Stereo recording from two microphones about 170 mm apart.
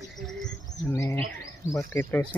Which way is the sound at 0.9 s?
20° left (ahead or behind).